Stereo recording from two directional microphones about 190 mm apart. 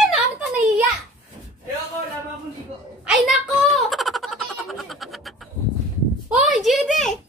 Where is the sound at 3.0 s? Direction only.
5° right (ahead or behind).